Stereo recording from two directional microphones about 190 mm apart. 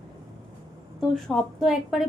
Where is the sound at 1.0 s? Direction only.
Centre (ahead or behind).